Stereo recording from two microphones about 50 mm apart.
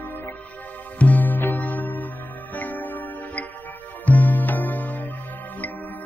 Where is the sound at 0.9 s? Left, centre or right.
Left.